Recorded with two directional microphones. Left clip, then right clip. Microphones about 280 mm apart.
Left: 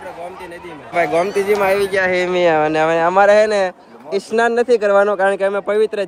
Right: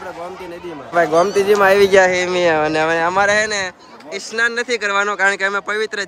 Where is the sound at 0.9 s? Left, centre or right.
Right.